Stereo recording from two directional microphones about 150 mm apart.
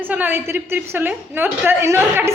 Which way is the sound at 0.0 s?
15° right (ahead or behind).